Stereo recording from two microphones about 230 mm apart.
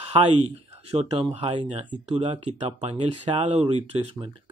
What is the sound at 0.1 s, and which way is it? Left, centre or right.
Speech, right.